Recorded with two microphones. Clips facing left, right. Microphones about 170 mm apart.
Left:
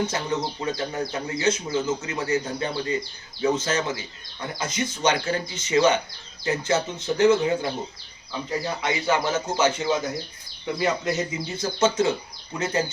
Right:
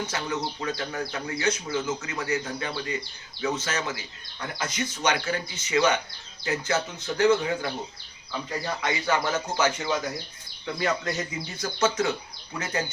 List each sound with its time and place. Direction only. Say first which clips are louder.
0.1 s speech: left 3 dB; 25° left (ahead or behind)
8.8 s speech: left 2 dB; 20° left (ahead or behind)